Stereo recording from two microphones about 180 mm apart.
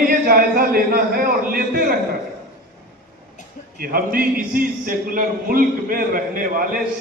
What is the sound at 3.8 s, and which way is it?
A man's voice, 55° right (ahead or behind).